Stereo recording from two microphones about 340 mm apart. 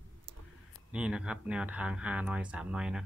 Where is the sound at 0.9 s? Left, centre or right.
Centre.